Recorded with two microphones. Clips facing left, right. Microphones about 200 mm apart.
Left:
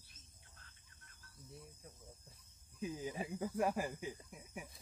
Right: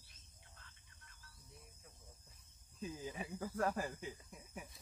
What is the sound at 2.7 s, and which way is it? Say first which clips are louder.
Speech: left 3 dB; 15° left (ahead or behind).